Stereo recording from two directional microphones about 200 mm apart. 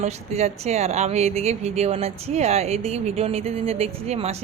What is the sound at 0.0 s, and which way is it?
Speech, 35° right (ahead or behind).